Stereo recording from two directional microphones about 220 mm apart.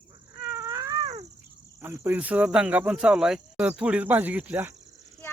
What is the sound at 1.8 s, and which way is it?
Speech, 10° right (ahead or behind).